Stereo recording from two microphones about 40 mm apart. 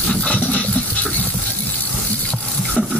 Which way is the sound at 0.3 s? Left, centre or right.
Left.